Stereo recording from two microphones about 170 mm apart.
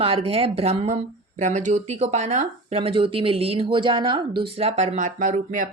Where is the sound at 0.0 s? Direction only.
35° right (ahead or behind).